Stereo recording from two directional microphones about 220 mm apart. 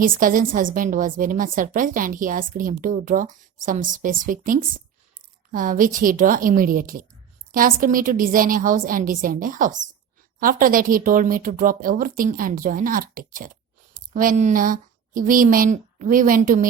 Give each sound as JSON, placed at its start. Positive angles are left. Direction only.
{"t": 0.0, "sound": "a woman's voice", "side_deg": -40}